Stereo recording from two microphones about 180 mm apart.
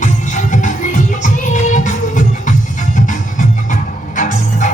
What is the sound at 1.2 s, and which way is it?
Music, 45° left (ahead or behind).